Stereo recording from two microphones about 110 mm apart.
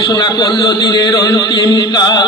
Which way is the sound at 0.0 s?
40° left (ahead or behind).